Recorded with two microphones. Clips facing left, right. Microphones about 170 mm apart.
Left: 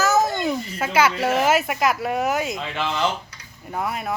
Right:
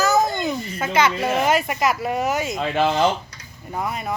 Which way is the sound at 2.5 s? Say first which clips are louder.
Right 6 dB; 45° right (ahead or behind).